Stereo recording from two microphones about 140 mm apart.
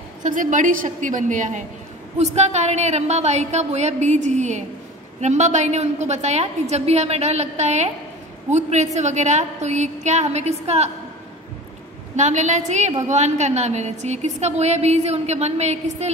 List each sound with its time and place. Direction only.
0.2 s a woman's voice: 65° right (ahead or behind)
2.1 s a woman's voice: 50° right (ahead or behind)
12.2 s a woman's voice: 55° right (ahead or behind)